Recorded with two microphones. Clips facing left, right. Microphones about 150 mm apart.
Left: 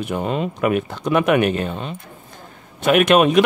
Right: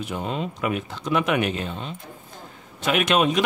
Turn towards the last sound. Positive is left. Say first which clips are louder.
# left 7 dB
turn(degrees=60)  # may be behind; listen again after turning